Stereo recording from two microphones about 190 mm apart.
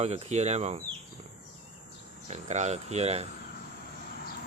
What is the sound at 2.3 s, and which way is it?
Speech, 35° right (ahead or behind).